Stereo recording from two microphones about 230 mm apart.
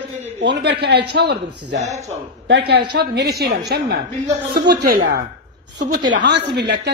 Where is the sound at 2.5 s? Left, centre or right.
Right.